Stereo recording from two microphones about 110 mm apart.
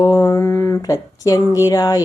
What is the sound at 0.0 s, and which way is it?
A woman's voice, 25° left (ahead or behind).